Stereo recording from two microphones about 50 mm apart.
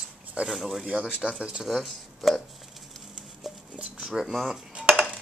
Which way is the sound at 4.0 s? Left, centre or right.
Centre.